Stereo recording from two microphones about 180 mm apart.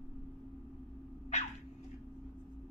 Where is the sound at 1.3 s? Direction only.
40° left (ahead or behind).